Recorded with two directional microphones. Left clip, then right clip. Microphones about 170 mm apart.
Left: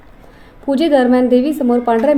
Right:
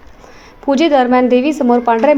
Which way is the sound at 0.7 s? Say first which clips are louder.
Right 2 dB; 10° right (ahead or behind).